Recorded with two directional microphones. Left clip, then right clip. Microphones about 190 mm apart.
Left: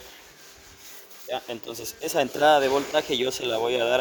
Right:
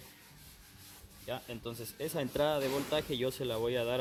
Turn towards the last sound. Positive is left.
turn(degrees=50)  # may be behind; listen again after turning